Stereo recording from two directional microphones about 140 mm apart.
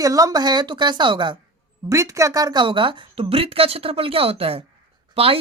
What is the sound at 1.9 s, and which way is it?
Speech, 20° right (ahead or behind).